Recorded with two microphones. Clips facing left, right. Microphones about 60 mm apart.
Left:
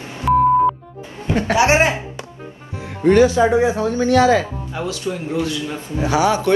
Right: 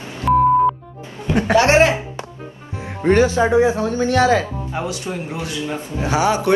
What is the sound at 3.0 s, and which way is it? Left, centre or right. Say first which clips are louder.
A man's voice: left 2 dB; right.